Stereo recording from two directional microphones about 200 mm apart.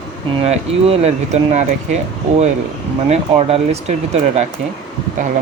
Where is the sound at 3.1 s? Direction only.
30° right (ahead or behind).